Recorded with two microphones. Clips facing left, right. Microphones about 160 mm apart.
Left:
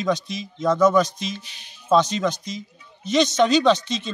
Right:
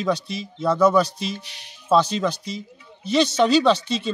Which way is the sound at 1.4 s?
75° right (ahead or behind).